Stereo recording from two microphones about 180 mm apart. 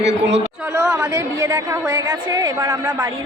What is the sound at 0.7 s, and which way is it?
A woman's voice, 15° right (ahead or behind).